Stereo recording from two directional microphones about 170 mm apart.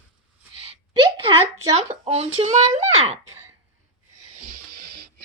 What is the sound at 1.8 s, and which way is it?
Speech, 40° right (ahead or behind).